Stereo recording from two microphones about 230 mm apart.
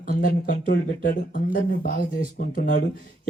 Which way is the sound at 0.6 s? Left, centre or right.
Left.